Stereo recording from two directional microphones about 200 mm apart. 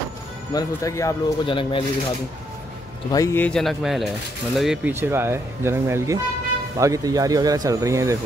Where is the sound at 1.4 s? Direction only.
25° left (ahead or behind).